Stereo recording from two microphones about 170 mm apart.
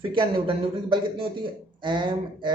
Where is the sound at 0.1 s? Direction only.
30° right (ahead or behind).